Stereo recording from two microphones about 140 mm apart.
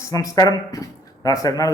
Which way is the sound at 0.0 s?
25° left (ahead or behind).